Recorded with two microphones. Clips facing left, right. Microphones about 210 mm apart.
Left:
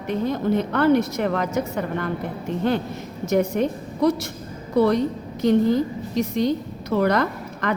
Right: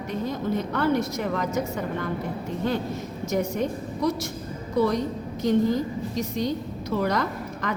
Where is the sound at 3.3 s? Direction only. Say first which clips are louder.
Left 6 dB; 60° left (ahead or behind).